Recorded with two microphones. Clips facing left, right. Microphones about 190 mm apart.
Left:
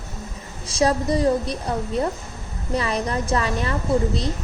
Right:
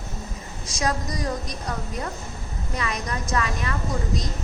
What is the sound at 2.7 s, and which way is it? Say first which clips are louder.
A woman's voice: left 7 dB; 30° left (ahead or behind).